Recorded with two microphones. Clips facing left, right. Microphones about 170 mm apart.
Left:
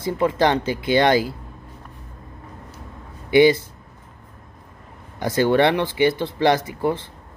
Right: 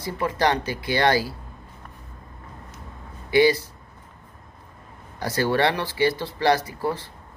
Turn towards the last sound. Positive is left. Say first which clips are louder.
# left 4 dB
turn(degrees=20)  # may be behind; listen again after turning